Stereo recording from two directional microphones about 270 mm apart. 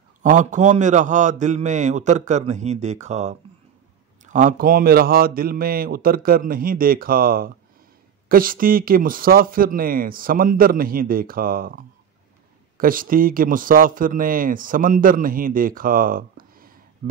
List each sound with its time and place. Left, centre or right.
0.2 s a man's voice: right